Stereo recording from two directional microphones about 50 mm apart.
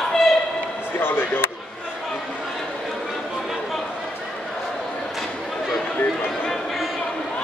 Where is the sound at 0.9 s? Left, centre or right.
Left.